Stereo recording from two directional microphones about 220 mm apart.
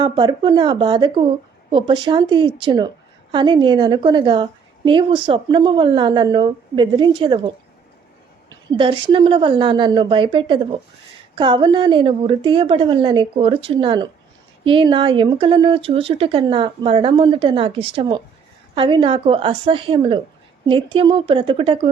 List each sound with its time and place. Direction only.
0.0 s speech: 20° right (ahead or behind)